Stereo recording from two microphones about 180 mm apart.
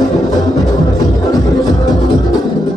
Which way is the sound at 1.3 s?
20° left (ahead or behind).